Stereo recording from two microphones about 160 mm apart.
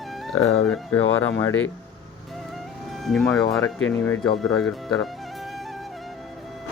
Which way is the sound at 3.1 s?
Centre (ahead or behind).